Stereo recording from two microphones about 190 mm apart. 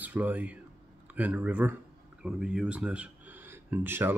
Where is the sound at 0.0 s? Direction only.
10° right (ahead or behind).